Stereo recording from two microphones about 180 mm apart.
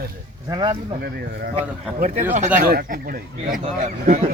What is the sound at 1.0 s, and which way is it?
Speech, 60° right (ahead or behind).